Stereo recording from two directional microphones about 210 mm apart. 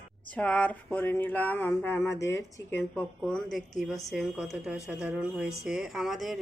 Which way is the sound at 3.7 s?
Centre (ahead or behind).